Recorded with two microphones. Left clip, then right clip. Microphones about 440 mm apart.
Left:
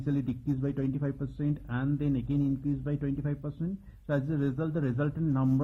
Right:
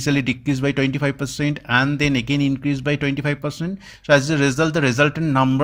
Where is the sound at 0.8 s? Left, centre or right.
Right.